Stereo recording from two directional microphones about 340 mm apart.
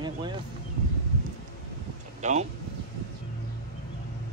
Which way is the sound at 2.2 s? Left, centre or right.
Right.